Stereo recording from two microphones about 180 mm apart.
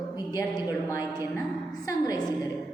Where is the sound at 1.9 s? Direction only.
20° left (ahead or behind).